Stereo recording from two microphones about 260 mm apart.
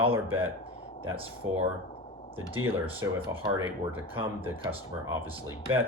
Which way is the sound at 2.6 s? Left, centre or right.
Centre.